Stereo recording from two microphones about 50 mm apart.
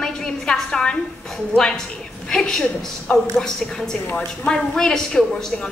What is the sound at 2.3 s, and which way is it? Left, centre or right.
Speech, centre.